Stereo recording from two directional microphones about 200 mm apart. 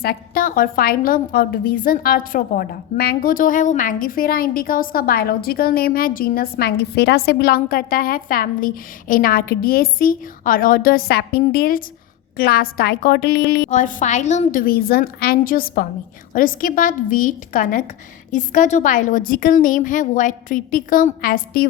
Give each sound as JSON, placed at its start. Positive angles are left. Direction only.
{"t": 0.0, "sound": "a woman's voice", "side_deg": 50}
{"t": 13.7, "sound": "a woman's voice", "side_deg": 40}